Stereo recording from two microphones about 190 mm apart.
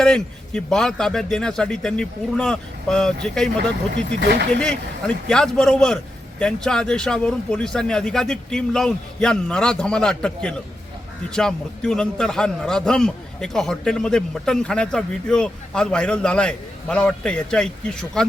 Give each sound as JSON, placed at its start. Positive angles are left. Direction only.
{"t": 0.0, "sound": "a man's voice", "side_deg": 5}
{"t": 4.2, "sound": "speech", "side_deg": -60}
{"t": 4.6, "sound": "a man's voice", "side_deg": 5}